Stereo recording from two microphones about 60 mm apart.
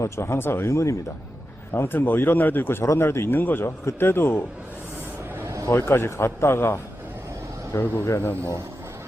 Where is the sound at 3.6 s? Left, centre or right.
Left.